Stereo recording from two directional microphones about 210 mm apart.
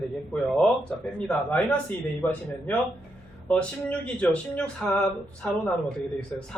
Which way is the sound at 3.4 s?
5° left (ahead or behind).